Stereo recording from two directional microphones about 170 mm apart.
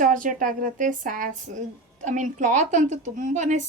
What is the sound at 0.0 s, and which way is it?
A woman's voice, 50° right (ahead or behind).